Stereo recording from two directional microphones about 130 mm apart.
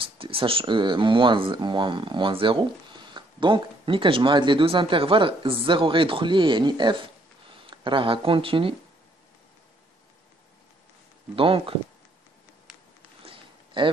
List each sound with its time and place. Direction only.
0.0 s speech: 45° right (ahead or behind)
11.3 s speech: 45° right (ahead or behind)
13.2 s a sound: 40° right (ahead or behind)